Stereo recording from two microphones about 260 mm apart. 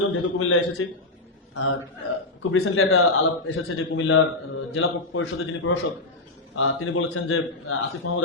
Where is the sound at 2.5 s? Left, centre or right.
Left.